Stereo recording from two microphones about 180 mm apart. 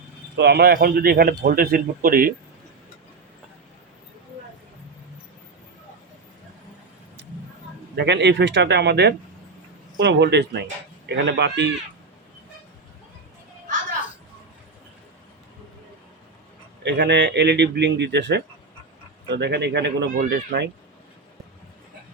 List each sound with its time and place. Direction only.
0.3 s a man's voice: 65° right (ahead or behind)
7.9 s speech: 70° right (ahead or behind)
16.8 s speech: 70° right (ahead or behind)
20.1 s speech: 50° right (ahead or behind)